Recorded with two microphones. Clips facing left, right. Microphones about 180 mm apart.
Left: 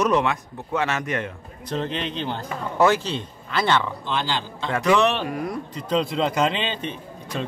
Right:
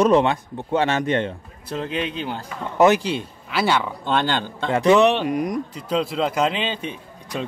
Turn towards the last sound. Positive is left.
turn(degrees=-10)  # may be behind; listen again after turning